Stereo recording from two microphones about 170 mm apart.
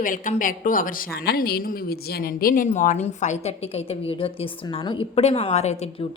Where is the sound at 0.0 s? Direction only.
50° left (ahead or behind).